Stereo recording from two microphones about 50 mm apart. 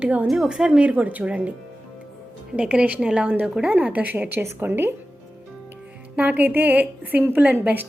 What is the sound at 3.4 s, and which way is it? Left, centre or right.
Speech, centre.